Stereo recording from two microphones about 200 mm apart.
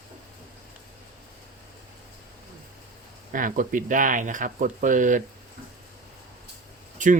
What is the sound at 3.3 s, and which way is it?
Speech, 40° right (ahead or behind).